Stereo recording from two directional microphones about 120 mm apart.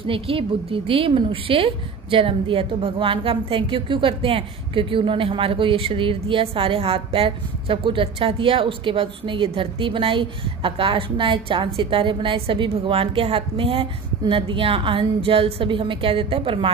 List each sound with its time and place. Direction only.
0.0 s a woman's voice: 50° right (ahead or behind)